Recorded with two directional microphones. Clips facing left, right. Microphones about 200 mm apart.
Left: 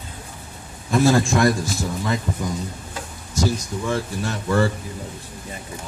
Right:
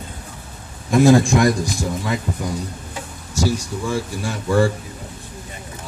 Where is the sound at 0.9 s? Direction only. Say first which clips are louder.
Right 4 dB; 15° right (ahead or behind).